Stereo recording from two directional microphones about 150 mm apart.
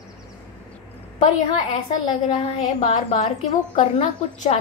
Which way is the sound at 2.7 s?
50° left (ahead or behind).